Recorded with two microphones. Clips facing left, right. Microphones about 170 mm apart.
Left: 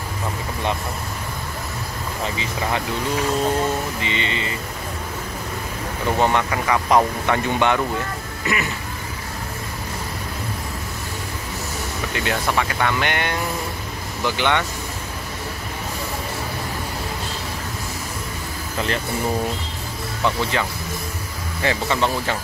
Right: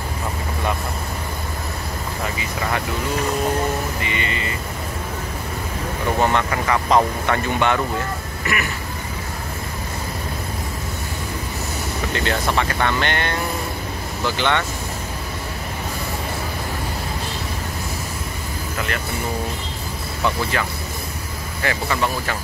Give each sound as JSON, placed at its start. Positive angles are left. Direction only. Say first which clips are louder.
{"t": 4.0, "sound": "speech", "louder": "even", "side_deg": 25}
{"t": 6.1, "sound": "speech", "louder": "even", "side_deg": 15}
{"t": 12.3, "sound": "speech", "louder": "even", "side_deg": 10}
{"t": 20.5, "sound": "speech", "louder": "left 1 dB", "side_deg": 20}